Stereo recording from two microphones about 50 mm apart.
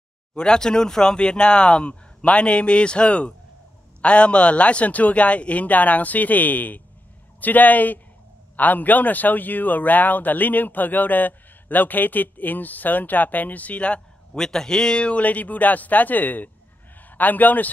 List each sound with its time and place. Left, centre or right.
0.3 s speech: centre
14.3 s a man's voice: centre; by 17.6 s left